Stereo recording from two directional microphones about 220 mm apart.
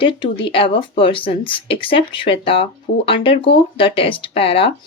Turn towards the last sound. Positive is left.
turn(degrees=25)  # may be behind; listen again after turning